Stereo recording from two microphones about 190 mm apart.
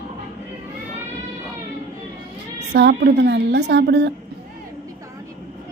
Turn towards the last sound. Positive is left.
turn(degrees=-65)  # may be behind; listen again after turning